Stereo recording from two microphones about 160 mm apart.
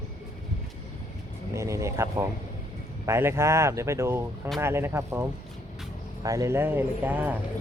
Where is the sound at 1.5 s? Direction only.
20° right (ahead or behind).